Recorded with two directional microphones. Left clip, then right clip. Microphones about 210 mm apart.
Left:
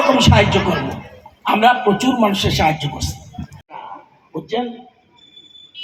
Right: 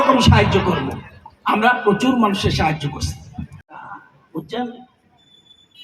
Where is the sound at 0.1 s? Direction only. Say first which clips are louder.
Left 1 dB; 35° left (ahead or behind).